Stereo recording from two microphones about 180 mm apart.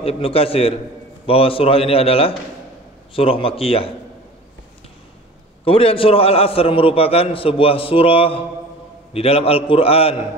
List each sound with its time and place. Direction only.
0.0 s a man's voice: 30° left (ahead or behind)
5.7 s a man's voice: 30° left (ahead or behind)